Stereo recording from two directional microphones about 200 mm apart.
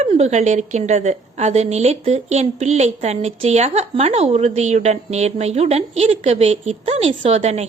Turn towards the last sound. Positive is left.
turn(degrees=-35)  # may be behind; listen again after turning